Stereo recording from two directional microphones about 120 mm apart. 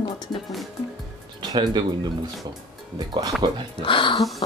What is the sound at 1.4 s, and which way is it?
Speech, 35° right (ahead or behind).